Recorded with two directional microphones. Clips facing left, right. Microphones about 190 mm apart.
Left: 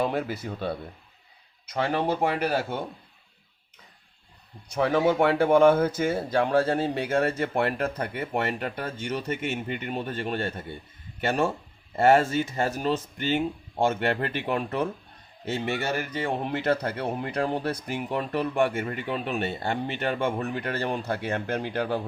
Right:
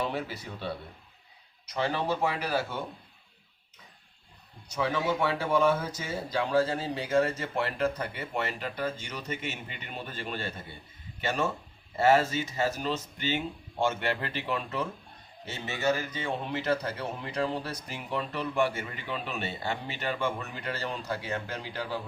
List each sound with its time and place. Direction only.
0.0 s speech: 50° left (ahead or behind)
4.7 s speech: 55° left (ahead or behind)